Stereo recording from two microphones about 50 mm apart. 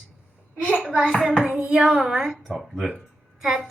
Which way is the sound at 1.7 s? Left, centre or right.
Centre.